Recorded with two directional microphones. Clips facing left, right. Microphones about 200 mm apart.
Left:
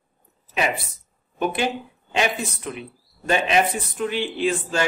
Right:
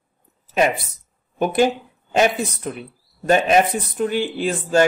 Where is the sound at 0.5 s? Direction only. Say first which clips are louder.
Right 6 dB; 40° right (ahead or behind).